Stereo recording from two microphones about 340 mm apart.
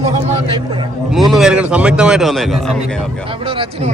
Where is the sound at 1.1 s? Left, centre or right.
Centre.